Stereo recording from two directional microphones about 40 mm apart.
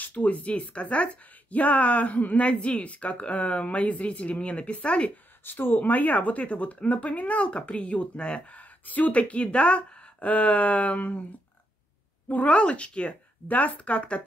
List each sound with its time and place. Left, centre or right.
0.0 s speech: left
5.4 s speech: left
5.8 s speech: left
8.5 s speech: left
12.4 s speech: left